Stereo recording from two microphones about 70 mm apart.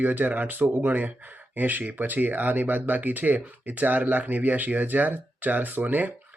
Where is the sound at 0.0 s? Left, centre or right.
Right.